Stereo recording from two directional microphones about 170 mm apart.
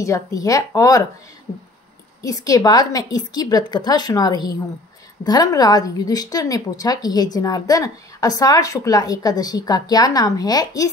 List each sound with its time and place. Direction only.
0.0 s a woman's voice: 20° left (ahead or behind)
2.2 s a woman's voice: 20° left (ahead or behind)